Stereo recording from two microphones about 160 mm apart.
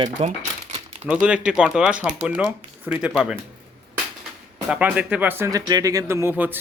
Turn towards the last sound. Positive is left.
turn(degrees=-10)  # may be behind; listen again after turning